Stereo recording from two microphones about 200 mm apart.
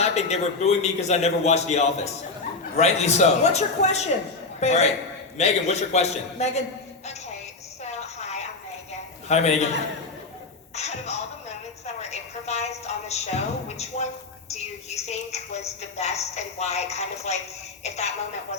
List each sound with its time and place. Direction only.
0.0 s a woman's voice: 35° left (ahead or behind)
7.9 s a sound: 35° left (ahead or behind)
9.3 s a woman's voice: 35° left (ahead or behind)
10.8 s a woman's voice: 35° left (ahead or behind)
12.1 s a woman's voice: 35° left (ahead or behind)